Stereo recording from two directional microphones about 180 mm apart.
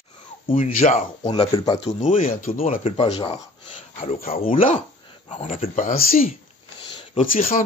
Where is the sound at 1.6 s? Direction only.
25° left (ahead or behind).